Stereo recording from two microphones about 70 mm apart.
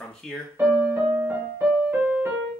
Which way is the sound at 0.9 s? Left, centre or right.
Right.